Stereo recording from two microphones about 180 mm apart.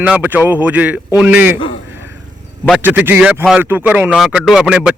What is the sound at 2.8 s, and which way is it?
A man's voice, 10° right (ahead or behind).